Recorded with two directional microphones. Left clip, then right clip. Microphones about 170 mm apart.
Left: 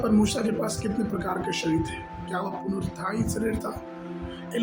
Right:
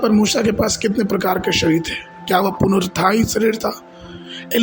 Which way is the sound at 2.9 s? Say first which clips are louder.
Right 14 dB; 55° right (ahead or behind).